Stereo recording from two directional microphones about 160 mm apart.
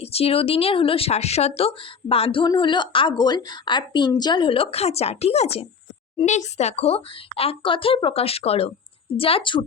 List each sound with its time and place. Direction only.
0.0 s a woman's voice: 40° left (ahead or behind)